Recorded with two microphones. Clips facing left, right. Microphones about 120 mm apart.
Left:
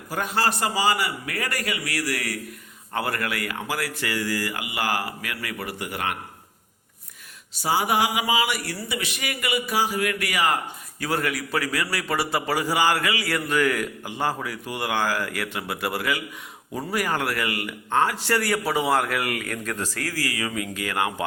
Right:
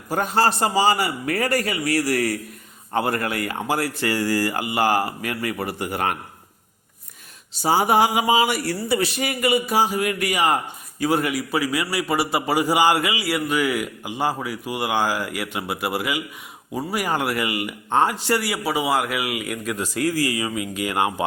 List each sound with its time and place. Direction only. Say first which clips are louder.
0.1 s speech: right 5 dB; 30° right (ahead or behind)
7.5 s a man's voice: right 5 dB; 30° right (ahead or behind)